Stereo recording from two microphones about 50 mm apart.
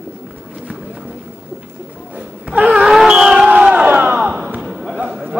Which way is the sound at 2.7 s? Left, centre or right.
Centre.